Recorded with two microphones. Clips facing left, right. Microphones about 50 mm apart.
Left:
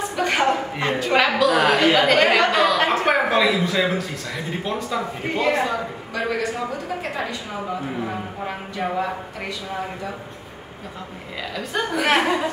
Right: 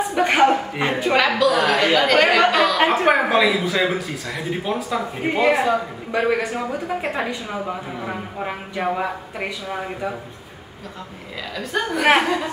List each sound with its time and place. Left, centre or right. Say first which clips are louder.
0.1 s a man's voice: right 4 dB; centre
1.1 s speech: even; centre
2.8 s a woman's voice: right 2 dB; right
3.1 s a man's voice: right 2 dB; centre
6.1 s a woman's voice: right 4 dB; right
11.5 s speech: right 1 dB; centre